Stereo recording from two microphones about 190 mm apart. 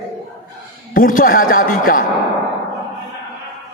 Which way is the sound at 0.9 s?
45° left (ahead or behind).